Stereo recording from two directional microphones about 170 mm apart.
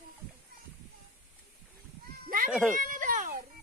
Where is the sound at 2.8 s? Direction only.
50° right (ahead or behind).